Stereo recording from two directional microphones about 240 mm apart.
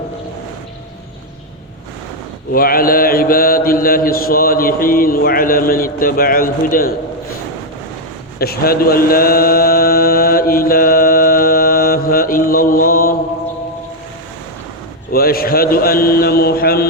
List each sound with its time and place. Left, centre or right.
2.5 s mantra: left
8.4 s mantra: left
15.1 s speech: left